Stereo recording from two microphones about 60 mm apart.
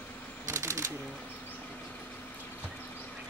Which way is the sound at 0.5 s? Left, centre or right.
Right.